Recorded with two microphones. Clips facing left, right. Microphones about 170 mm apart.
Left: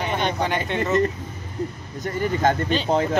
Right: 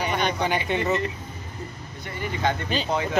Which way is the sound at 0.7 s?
5° right (ahead or behind).